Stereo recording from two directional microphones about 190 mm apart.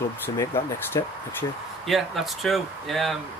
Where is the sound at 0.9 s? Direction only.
20° left (ahead or behind).